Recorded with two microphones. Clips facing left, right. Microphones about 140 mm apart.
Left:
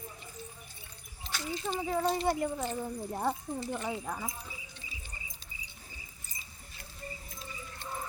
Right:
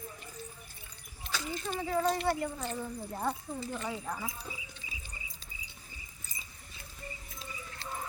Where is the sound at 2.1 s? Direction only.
15° left (ahead or behind).